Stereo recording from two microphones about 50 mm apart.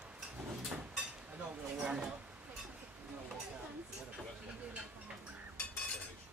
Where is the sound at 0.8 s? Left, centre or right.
Centre.